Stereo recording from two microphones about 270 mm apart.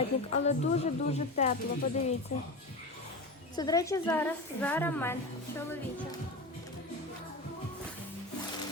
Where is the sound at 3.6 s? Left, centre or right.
Centre.